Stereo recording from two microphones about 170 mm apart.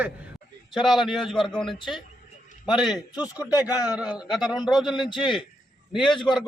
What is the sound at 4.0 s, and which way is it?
A man's voice, 5° right (ahead or behind).